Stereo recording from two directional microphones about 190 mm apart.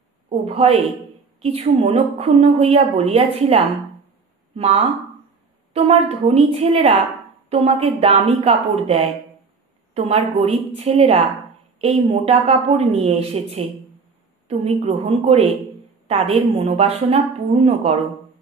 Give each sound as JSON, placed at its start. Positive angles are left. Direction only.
{"t": 0.3, "sound": "a woman's voice", "side_deg": -30}